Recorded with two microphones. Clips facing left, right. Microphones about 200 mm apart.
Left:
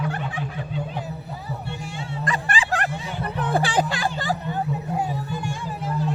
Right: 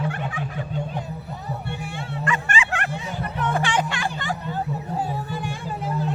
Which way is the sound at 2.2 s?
35° left (ahead or behind).